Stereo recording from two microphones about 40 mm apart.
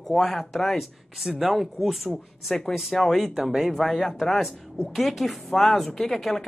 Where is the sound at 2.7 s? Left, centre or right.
Centre.